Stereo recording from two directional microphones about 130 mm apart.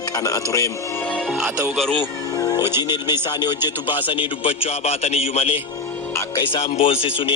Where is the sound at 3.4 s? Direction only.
35° left (ahead or behind).